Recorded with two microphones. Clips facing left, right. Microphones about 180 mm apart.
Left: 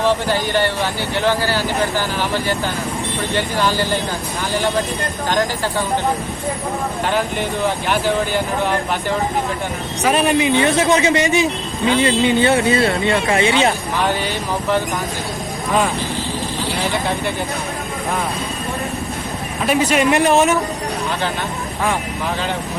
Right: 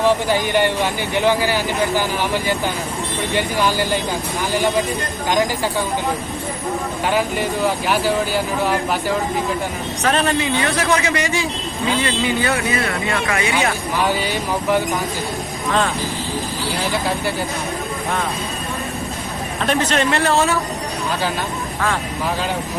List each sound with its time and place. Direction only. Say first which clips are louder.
0.0 s speech: right 1 dB; 15° right (ahead or behind)
7.1 s speech: right 2 dB; 10° right (ahead or behind)
10.0 s speech: left 3 dB; 10° left (ahead or behind)
16.8 s speech: even; centre (ahead or behind)
19.6 s a man's voice: left 3 dB; 10° left (ahead or behind)